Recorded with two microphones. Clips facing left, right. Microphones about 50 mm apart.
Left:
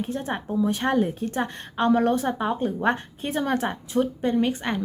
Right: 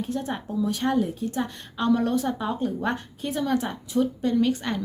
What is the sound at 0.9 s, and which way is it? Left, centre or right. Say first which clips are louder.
A woman's voice: left 2 dB; left.